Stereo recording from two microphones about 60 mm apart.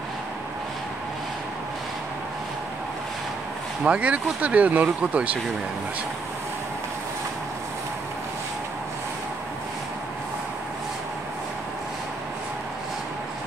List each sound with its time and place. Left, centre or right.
3.8 s speech: right